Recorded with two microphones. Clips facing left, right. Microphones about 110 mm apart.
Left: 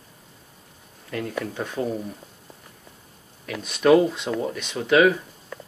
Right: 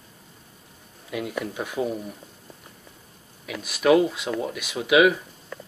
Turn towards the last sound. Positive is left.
turn(degrees=-10)  # may be behind; listen again after turning